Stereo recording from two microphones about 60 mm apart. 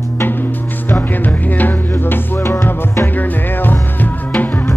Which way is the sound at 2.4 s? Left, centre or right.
Left.